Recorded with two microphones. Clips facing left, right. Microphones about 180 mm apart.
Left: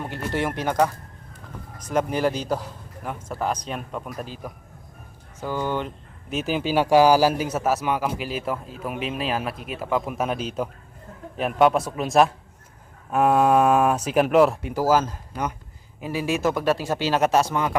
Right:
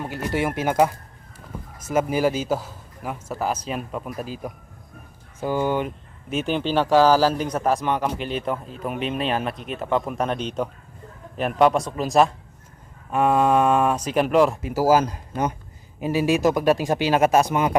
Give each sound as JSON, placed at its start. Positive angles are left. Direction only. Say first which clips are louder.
{"t": 0.2, "sound": "a man's voice", "louder": "right 2 dB", "side_deg": -10}
{"t": 5.4, "sound": "speech", "louder": "right 4 dB", "side_deg": -15}
{"t": 6.3, "sound": "a man's voice", "louder": "right 1 dB", "side_deg": 5}
{"t": 15.3, "sound": "speech", "louder": "right 4 dB", "side_deg": -25}